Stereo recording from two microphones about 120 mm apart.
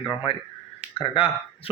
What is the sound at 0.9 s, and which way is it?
Speech, 50° left (ahead or behind).